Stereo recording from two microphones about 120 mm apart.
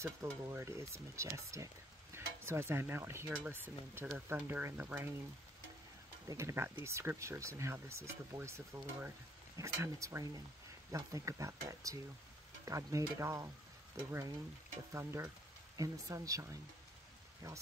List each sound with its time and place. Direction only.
0.0 s stir: 25° right (ahead or behind)
6.2 s stir: 25° right (ahead or behind)
14.9 s stir: 25° right (ahead or behind)